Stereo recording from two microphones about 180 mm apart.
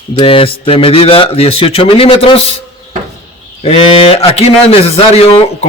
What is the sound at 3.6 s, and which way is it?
Speech, 35° left (ahead or behind).